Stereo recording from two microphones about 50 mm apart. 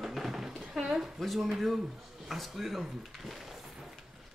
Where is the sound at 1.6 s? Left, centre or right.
Centre.